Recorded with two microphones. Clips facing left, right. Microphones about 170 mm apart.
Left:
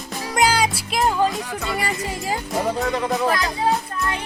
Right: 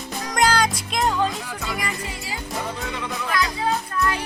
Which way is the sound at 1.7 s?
35° left (ahead or behind).